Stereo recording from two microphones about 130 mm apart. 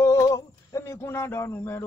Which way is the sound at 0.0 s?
25° left (ahead or behind).